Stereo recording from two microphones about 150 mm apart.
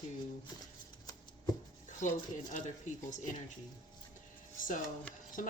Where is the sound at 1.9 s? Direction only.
55° left (ahead or behind).